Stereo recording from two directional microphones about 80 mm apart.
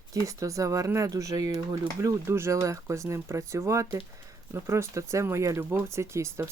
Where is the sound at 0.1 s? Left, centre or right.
Right.